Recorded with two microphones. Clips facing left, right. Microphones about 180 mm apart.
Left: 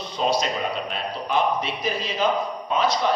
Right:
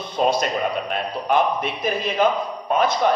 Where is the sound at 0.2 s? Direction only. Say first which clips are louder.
Right 3 dB; 55° right (ahead or behind).